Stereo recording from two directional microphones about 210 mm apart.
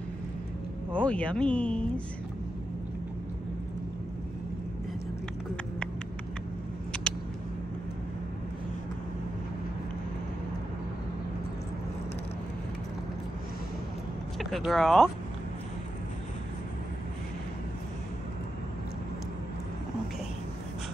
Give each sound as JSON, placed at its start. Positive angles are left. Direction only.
{"t": 0.9, "sound": "speech", "side_deg": 5}
{"t": 14.4, "sound": "speech", "side_deg": 0}